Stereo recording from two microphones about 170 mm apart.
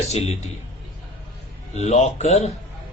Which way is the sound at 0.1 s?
40° left (ahead or behind).